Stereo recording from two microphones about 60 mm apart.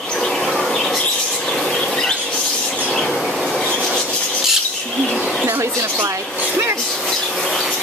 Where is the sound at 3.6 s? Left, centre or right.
Centre.